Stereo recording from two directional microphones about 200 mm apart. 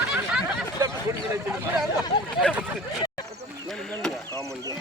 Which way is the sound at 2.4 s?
5° right (ahead or behind).